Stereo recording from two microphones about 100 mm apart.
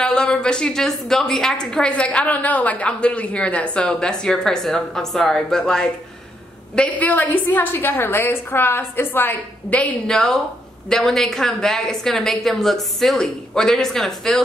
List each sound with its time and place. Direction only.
0.0 s a woman's voice: 10° left (ahead or behind)